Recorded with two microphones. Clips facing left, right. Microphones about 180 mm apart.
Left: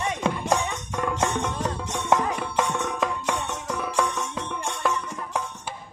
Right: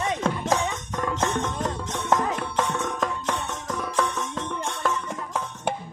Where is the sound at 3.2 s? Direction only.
10° left (ahead or behind).